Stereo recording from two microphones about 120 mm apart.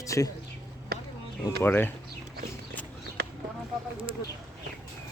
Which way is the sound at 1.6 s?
15° left (ahead or behind).